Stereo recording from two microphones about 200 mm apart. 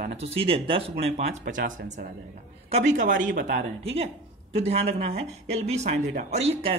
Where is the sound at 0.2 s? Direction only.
30° right (ahead or behind).